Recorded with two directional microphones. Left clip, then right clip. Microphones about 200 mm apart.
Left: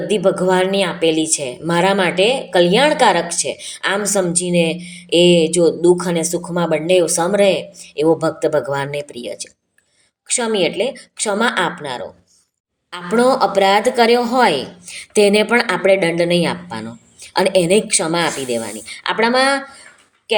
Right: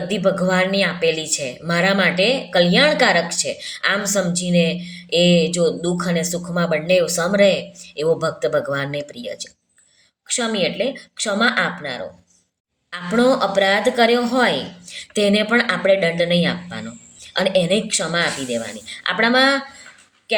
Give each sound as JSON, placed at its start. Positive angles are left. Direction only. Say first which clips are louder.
{"t": 0.1, "sound": "a woman's voice", "louder": "left 4 dB", "side_deg": 15}